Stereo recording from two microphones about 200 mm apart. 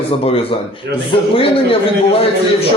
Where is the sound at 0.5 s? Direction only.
25° left (ahead or behind).